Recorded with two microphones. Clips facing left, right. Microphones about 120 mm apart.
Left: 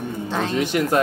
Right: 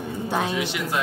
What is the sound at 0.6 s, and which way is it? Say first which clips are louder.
Speech: left 7 dB; 50° left (ahead or behind).